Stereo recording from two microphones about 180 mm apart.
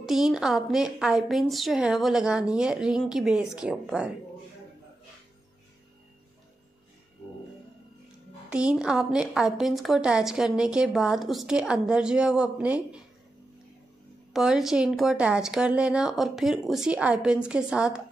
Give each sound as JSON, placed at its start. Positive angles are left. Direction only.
{"t": 0.0, "sound": "a woman's voice", "side_deg": 0}
{"t": 8.5, "sound": "a woman's voice", "side_deg": -5}
{"t": 14.3, "sound": "a woman's voice", "side_deg": -5}